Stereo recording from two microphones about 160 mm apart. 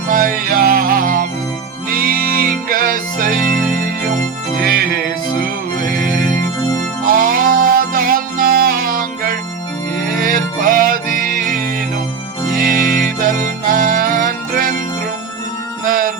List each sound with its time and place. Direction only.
0.1 s music: 60° right (ahead or behind)
4.6 s music: 65° right (ahead or behind)
15.9 s music: 60° right (ahead or behind)